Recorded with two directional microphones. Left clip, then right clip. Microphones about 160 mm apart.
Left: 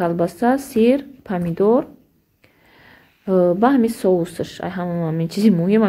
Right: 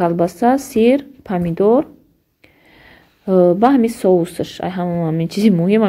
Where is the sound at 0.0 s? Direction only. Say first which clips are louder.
Right 4 dB; 25° right (ahead or behind).